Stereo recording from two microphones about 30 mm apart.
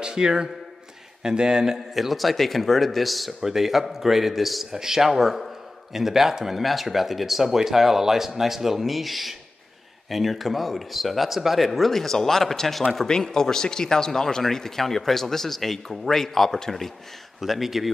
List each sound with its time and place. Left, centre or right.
0.0 s speech: right
2.0 s speech: centre
3.4 s speech: centre
4.7 s speech: centre
11.9 s speech: centre
13.0 s speech: centre
17.4 s speech: centre